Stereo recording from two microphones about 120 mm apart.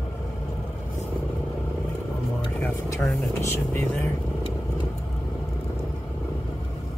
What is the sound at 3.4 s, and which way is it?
Speech, 20° left (ahead or behind).